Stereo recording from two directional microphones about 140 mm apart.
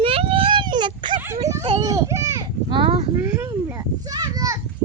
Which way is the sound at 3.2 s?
15° right (ahead or behind).